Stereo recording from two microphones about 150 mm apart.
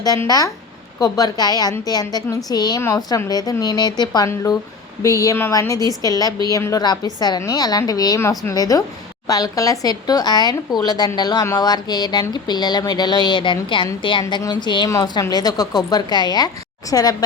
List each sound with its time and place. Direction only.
0.0 s speech: 25° left (ahead or behind)